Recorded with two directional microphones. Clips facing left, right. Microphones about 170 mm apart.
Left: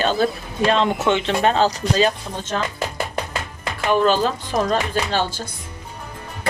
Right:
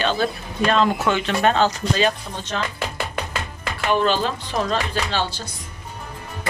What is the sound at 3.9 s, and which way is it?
Speech, 40° left (ahead or behind).